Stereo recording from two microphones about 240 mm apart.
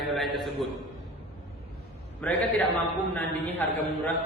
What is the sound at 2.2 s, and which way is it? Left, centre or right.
A man's voice, centre.